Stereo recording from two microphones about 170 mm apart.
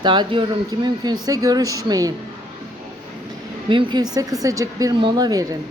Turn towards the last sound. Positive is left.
turn(degrees=-20)  # may be behind; listen again after turning